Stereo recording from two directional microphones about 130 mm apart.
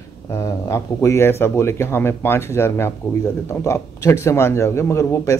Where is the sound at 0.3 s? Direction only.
20° left (ahead or behind).